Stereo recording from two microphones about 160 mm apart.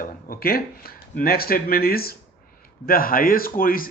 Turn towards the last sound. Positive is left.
turn(degrees=60)  # may be behind; listen again after turning